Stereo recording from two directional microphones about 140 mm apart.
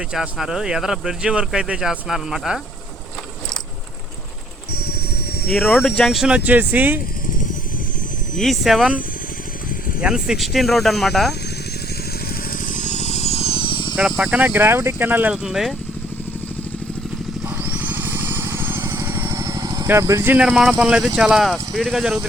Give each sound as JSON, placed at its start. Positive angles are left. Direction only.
{"t": 0.1, "sound": "speech", "side_deg": -5}
{"t": 4.7, "sound": "vehicle", "side_deg": 90}
{"t": 5.5, "sound": "speech", "side_deg": 0}
{"t": 8.4, "sound": "speech", "side_deg": 0}
{"t": 10.0, "sound": "speech", "side_deg": -5}
{"t": 12.5, "sound": "vehicle", "side_deg": 70}
{"t": 13.9, "sound": "speech", "side_deg": -5}
{"t": 17.6, "sound": "vehicle", "side_deg": -10}
{"t": 19.9, "sound": "speech", "side_deg": -20}